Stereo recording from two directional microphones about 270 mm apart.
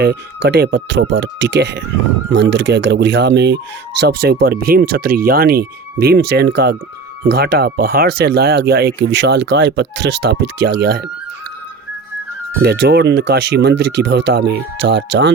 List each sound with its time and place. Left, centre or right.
0.0 s speech: right
12.6 s speech: right